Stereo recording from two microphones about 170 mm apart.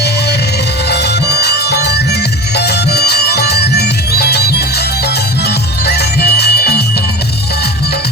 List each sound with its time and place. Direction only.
0.9 s music: 75° left (ahead or behind)
5.8 s music: 70° left (ahead or behind)